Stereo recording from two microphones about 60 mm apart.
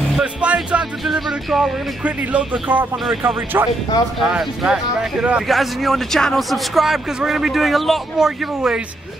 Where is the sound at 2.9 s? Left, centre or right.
Centre.